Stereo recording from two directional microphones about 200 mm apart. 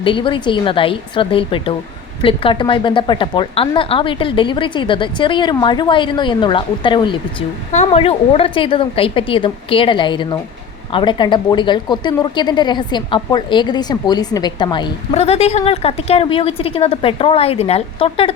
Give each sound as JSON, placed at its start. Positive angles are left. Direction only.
{"t": 0.0, "sound": "speech", "side_deg": 25}